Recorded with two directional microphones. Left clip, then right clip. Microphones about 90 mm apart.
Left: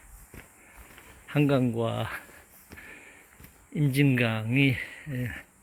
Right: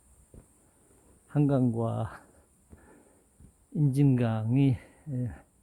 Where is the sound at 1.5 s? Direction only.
30° right (ahead or behind).